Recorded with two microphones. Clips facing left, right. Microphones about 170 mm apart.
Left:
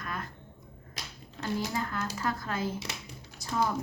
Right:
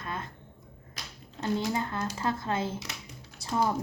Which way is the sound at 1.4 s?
25° right (ahead or behind).